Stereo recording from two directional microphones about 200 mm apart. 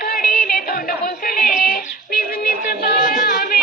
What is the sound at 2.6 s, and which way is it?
Music, 45° left (ahead or behind).